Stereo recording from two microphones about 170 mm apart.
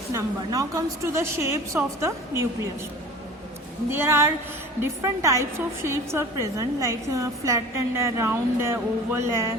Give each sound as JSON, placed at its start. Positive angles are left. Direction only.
{"t": 0.1, "sound": "a woman's voice", "side_deg": -20}
{"t": 3.8, "sound": "a woman's voice", "side_deg": -15}